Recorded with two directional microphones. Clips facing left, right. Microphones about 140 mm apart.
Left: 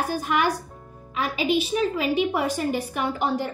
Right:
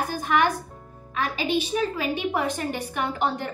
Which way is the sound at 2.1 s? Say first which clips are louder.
Left 3 dB; 5° left (ahead or behind).